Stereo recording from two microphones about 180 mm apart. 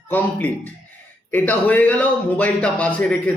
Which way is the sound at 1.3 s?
10° left (ahead or behind).